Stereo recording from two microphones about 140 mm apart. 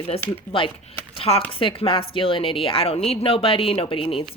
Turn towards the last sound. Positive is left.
turn(degrees=40)  # may be behind; listen again after turning